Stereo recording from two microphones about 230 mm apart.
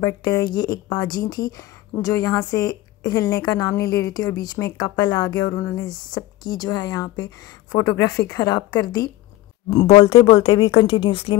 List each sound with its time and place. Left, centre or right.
0.0 s a woman's voice: centre